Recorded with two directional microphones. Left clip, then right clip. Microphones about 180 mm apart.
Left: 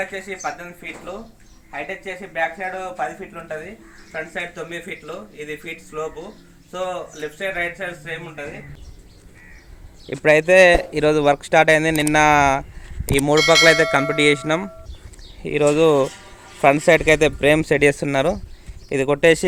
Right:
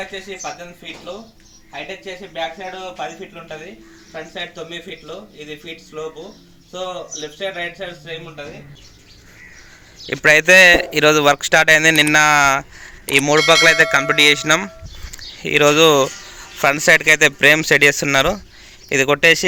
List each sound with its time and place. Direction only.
0.0 s speech: centre (ahead or behind)
2.6 s speech: 5° left (ahead or behind)
4.1 s speech: 15° right (ahead or behind)
6.7 s speech: 15° right (ahead or behind)
10.2 s speech: centre (ahead or behind); by 19.5 s 15° left (ahead or behind)